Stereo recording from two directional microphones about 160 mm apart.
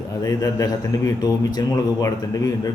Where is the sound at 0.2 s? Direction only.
25° left (ahead or behind).